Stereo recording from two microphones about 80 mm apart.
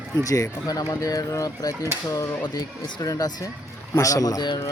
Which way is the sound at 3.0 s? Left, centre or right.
Left.